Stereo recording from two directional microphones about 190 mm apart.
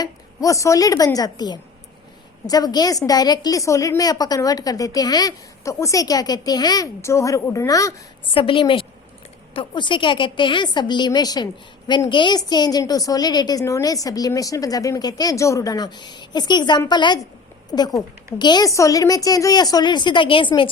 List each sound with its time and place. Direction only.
0.0 s a woman's voice: 15° left (ahead or behind)
8.4 s a woman's voice: 30° left (ahead or behind)